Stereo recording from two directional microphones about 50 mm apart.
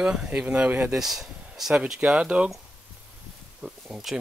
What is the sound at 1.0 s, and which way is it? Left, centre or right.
Speech, centre.